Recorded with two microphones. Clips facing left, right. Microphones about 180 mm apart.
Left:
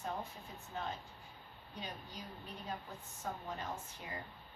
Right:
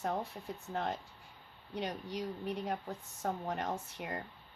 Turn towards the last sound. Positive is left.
turn(degrees=-70)  # may be behind; listen again after turning